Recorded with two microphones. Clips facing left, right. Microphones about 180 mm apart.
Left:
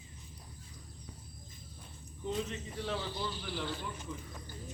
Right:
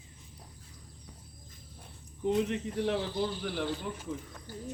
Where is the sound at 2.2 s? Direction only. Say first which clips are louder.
Right 8 dB; 65° right (ahead or behind).